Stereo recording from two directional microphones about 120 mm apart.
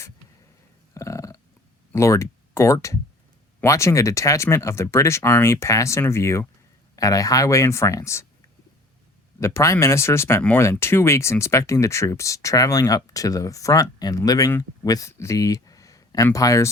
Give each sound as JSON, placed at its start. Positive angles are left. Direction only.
{"t": 0.9, "sound": "burping", "side_deg": 25}
{"t": 1.9, "sound": "speech", "side_deg": 25}
{"t": 9.4, "sound": "speech", "side_deg": 25}